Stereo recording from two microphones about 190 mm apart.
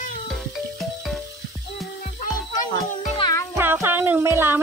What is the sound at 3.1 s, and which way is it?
Music, 20° left (ahead or behind).